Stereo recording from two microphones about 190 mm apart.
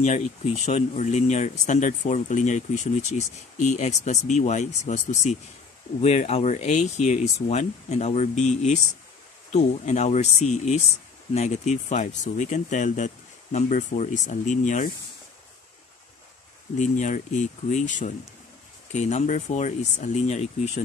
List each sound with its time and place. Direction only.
0.0 s speech: 35° left (ahead or behind)
16.7 s speech: 40° left (ahead or behind)